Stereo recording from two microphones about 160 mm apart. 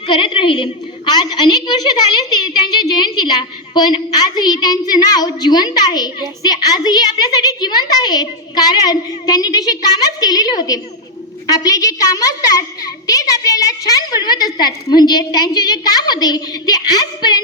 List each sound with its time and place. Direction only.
0.1 s a woman's voice: 30° left (ahead or behind)